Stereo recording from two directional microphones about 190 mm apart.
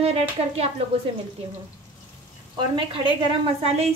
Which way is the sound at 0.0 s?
30° right (ahead or behind).